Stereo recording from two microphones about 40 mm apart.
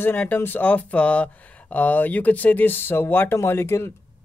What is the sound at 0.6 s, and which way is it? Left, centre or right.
Speech, left.